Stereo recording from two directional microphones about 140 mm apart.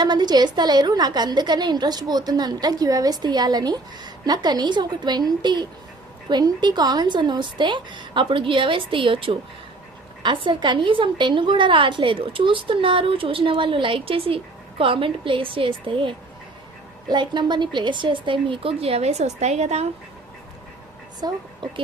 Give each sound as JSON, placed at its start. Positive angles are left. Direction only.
{"t": 0.0, "sound": "a woman's voice", "side_deg": -30}
{"t": 21.2, "sound": "a woman's voice", "side_deg": -30}